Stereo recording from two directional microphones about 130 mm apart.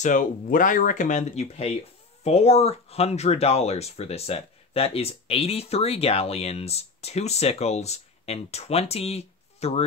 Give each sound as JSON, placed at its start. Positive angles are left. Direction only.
{"t": 0.0, "sound": "speech", "side_deg": 85}